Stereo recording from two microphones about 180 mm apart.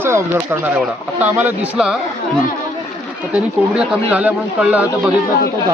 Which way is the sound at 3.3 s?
5° right (ahead or behind).